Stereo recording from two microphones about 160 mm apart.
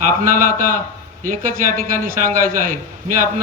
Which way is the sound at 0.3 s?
55° right (ahead or behind).